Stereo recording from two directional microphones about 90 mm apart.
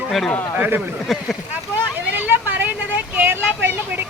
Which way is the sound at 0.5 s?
20° right (ahead or behind).